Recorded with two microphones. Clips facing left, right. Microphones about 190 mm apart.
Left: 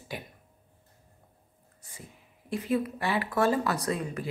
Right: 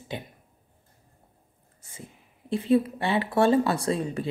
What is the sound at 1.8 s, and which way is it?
A woman's voice, 25° right (ahead or behind).